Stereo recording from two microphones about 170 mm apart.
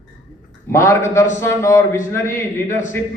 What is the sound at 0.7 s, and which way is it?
A man's voice, 15° left (ahead or behind).